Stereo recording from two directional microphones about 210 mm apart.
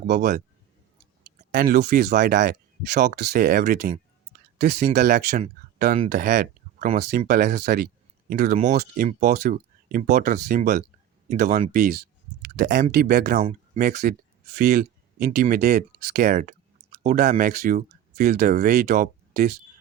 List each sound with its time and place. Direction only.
0.2 s speech: 40° right (ahead or behind)
1.5 s speech: 50° right (ahead or behind)